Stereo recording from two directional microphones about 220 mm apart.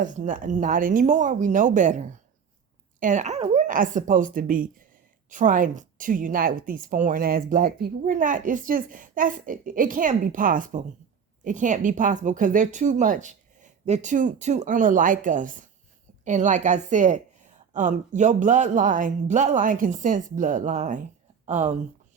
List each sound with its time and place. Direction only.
0.0 s a woman's voice: 35° right (ahead or behind)